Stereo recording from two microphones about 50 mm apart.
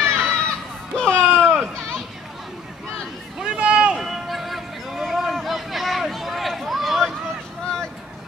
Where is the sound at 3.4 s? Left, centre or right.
Centre.